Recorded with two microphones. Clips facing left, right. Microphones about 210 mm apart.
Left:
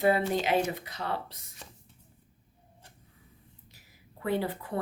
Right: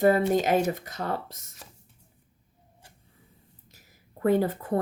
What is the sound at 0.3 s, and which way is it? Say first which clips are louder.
Speech: right 4 dB; 45° right (ahead or behind).